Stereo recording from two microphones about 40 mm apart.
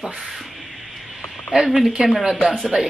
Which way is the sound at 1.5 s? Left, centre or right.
Centre.